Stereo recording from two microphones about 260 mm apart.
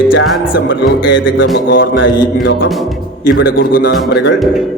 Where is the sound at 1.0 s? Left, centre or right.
Left.